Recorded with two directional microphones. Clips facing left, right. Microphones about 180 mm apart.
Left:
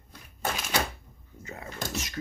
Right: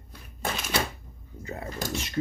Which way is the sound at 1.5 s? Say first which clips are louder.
Right 4 dB; 35° right (ahead or behind).